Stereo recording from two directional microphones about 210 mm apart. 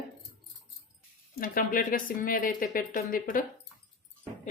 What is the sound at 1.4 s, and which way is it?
Speech, 40° left (ahead or behind).